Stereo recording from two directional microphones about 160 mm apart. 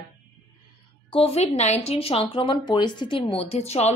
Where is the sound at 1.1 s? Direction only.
40° left (ahead or behind).